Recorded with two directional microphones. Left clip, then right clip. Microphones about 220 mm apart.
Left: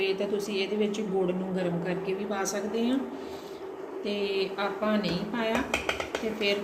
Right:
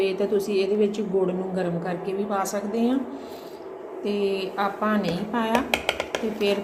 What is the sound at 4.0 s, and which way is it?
Speech, 30° right (ahead or behind).